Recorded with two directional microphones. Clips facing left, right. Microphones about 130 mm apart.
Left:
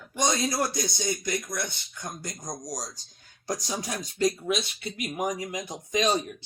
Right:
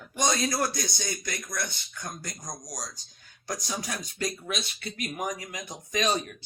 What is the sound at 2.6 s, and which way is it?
Speech, 40° left (ahead or behind).